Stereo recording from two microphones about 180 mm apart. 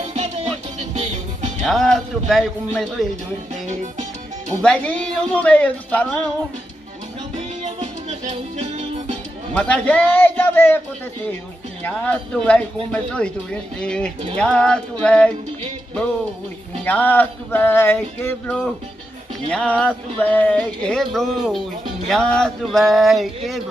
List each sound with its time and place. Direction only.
0.0 s music: 40° right (ahead or behind)
1.7 s speech: centre (ahead or behind)
4.6 s speech: 5° left (ahead or behind)
7.6 s music: 40° right (ahead or behind)
9.5 s speech: 5° left (ahead or behind)
11.8 s speech: 5° left (ahead or behind)
16.7 s speech: 10° left (ahead or behind)